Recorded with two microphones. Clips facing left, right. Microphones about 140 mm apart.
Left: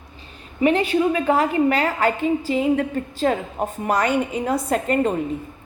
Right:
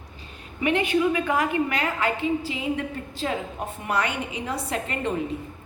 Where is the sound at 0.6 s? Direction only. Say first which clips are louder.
Left 4 dB; 35° left (ahead or behind).